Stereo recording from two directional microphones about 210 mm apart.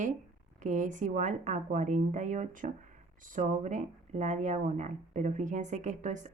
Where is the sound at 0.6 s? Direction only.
35° right (ahead or behind).